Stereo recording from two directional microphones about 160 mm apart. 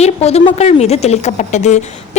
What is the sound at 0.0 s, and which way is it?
A woman's voice, 40° left (ahead or behind).